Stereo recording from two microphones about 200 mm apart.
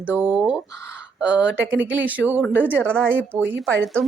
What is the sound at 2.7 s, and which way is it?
Speech, 5° left (ahead or behind).